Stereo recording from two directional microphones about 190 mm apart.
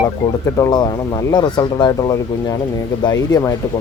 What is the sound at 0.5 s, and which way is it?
Speech, 20° left (ahead or behind).